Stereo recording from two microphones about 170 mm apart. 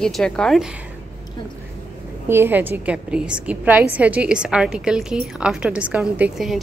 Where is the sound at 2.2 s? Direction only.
15° right (ahead or behind).